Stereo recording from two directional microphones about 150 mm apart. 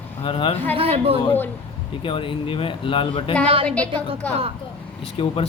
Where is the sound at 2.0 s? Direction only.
35° left (ahead or behind).